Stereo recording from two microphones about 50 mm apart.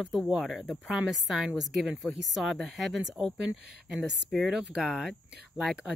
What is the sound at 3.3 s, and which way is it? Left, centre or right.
Speech, centre.